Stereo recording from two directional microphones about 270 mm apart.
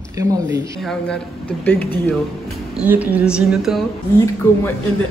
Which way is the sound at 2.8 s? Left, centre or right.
Centre.